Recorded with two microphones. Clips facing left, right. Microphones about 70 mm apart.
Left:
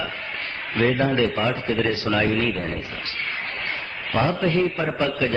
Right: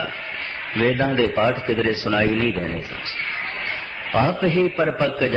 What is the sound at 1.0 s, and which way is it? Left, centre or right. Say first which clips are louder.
Speech: right 1 dB; right.